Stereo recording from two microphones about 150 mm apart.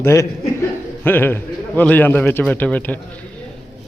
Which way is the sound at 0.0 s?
20° left (ahead or behind).